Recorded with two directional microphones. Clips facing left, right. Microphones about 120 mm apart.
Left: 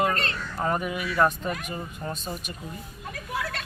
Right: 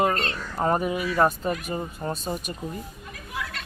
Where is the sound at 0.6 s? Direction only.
30° right (ahead or behind).